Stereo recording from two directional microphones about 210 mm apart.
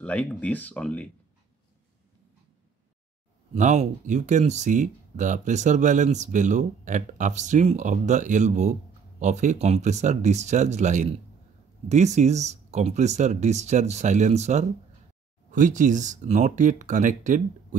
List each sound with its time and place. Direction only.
0.0 s speech: 5° left (ahead or behind)
3.5 s speech: 35° right (ahead or behind)